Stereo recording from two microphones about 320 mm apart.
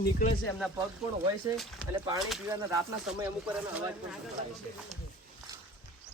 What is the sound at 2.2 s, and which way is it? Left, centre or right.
Speech, centre.